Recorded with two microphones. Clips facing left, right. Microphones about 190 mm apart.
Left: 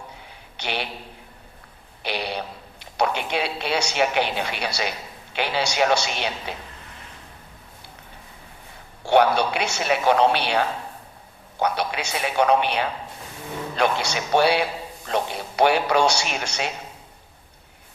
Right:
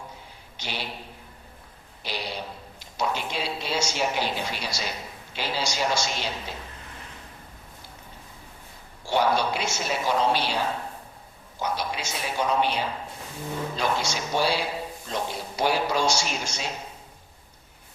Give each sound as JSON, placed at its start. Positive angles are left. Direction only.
{"t": 0.5, "sound": "a sound", "side_deg": 65}
{"t": 2.0, "sound": "a man's voice", "side_deg": 65}
{"t": 9.0, "sound": "a woman's voice", "side_deg": 65}